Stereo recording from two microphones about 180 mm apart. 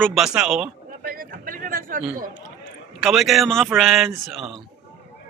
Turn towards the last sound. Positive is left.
turn(degrees=0)  # may be behind; listen again after turning